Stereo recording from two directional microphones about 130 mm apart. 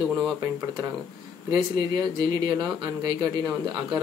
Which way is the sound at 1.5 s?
30° right (ahead or behind).